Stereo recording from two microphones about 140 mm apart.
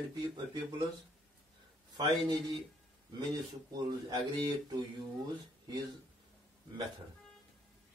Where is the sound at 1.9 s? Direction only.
25° right (ahead or behind).